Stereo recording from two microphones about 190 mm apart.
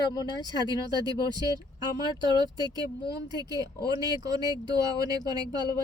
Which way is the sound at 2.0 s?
20° right (ahead or behind).